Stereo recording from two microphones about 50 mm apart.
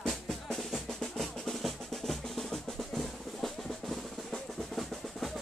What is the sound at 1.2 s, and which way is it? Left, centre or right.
Drum, centre.